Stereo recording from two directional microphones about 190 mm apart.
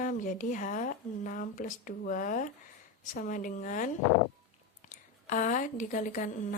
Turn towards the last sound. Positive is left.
turn(degrees=45)  # may be behind; listen again after turning